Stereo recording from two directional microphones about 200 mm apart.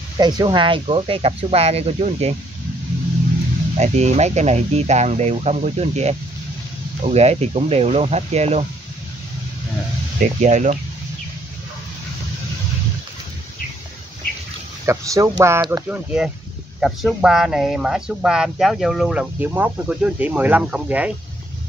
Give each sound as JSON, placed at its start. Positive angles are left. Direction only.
{"t": 0.2, "sound": "speech", "side_deg": -20}
{"t": 3.7, "sound": "speech", "side_deg": -35}
{"t": 10.4, "sound": "speech", "side_deg": -35}
{"t": 14.9, "sound": "speech", "side_deg": -15}